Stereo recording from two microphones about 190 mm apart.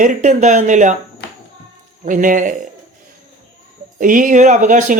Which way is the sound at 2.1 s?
45° right (ahead or behind).